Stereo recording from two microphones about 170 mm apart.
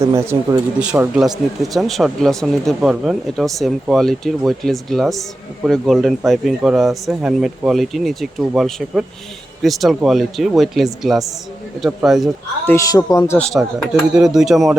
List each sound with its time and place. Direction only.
0.0 s speech: 15° right (ahead or behind); by 12.3 s centre (ahead or behind)
12.6 s speech: 20° left (ahead or behind)
13.4 s speech: centre (ahead or behind)